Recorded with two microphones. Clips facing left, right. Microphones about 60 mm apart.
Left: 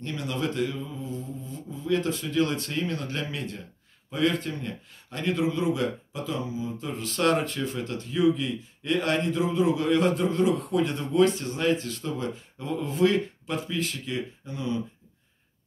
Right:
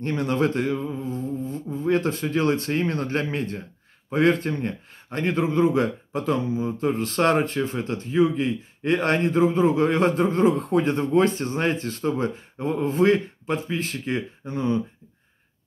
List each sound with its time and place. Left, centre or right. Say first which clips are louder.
0.0 s a man's voice: right 7 dB; right